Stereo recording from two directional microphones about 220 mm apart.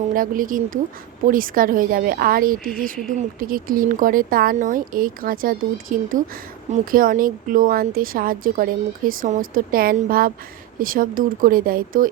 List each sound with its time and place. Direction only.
0.1 s a woman's voice: 40° right (ahead or behind)